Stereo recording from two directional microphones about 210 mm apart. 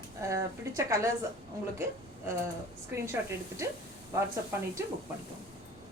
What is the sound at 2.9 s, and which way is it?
Speech, 15° right (ahead or behind).